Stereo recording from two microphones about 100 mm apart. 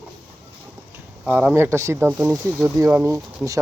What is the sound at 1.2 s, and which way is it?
Speech, 15° right (ahead or behind).